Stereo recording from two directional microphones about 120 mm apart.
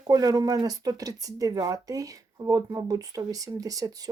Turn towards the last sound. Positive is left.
turn(degrees=-30)  # may be behind; listen again after turning